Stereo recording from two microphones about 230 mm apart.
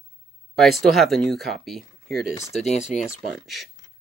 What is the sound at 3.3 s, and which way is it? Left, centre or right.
Speech, centre.